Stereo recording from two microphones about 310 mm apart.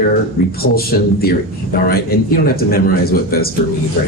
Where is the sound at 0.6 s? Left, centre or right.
Left.